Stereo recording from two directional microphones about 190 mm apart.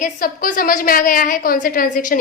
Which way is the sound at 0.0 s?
45° left (ahead or behind).